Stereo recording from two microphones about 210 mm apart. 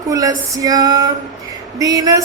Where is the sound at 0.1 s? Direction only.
15° right (ahead or behind).